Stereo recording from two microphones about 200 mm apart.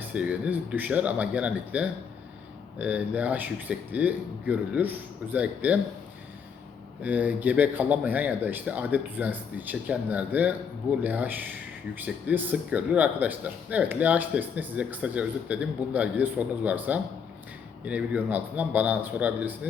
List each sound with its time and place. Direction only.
0.1 s speech: 5° right (ahead or behind)
7.0 s speech: 10° right (ahead or behind)